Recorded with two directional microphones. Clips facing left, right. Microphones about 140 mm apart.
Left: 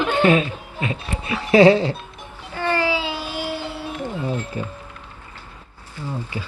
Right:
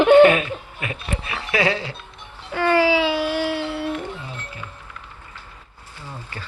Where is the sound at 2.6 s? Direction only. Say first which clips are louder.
Right 4 dB; 90° right; by 3.8 s 70° right (ahead or behind).